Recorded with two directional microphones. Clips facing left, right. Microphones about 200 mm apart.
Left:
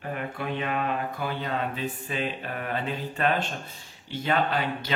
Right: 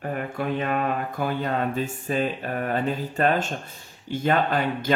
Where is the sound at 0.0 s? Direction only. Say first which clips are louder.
Right 4 dB; 45° right (ahead or behind).